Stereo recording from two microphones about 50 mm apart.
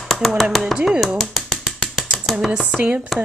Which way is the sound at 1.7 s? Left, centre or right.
Centre.